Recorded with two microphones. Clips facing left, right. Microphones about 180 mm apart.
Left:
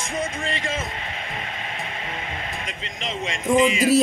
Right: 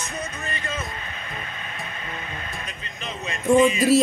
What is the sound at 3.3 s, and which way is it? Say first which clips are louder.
Speech: right 2 dB; 90° left.